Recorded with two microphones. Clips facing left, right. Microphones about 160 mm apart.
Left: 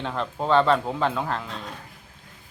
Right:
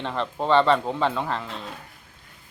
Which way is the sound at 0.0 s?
Centre (ahead or behind).